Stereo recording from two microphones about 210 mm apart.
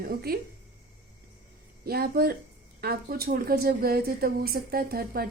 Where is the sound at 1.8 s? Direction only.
45° right (ahead or behind).